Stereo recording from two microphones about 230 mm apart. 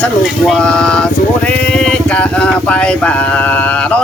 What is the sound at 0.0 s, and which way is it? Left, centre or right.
Speech, centre.